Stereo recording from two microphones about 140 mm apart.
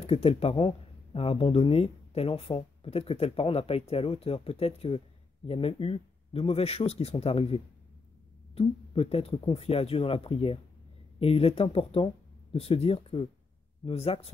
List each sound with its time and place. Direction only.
0.0 s speech: 45° left (ahead or behind)